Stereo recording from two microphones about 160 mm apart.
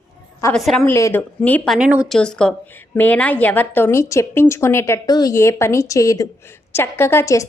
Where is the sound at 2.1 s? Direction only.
5° left (ahead or behind).